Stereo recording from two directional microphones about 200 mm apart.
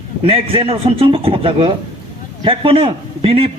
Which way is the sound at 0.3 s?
30° right (ahead or behind).